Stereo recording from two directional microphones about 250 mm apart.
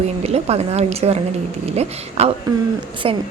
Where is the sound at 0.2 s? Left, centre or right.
Right.